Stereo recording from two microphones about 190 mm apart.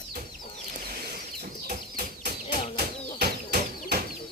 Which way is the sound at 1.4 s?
55° right (ahead or behind).